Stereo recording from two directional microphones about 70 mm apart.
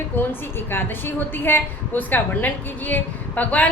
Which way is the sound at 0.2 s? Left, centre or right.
Left.